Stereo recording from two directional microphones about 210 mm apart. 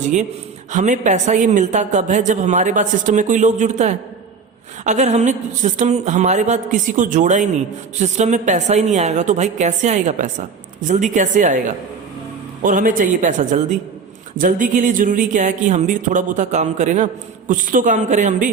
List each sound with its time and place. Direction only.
0.7 s a woman's voice: 35° right (ahead or behind)